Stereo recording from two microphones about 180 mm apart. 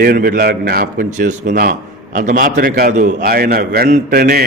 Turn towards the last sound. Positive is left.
turn(degrees=-50)  # may be behind; listen again after turning